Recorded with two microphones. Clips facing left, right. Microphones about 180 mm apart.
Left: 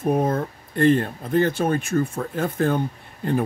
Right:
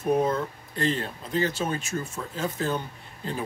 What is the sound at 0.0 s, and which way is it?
Speech, 50° left (ahead or behind).